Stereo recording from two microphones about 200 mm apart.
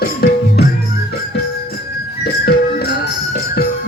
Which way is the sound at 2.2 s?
55° left (ahead or behind).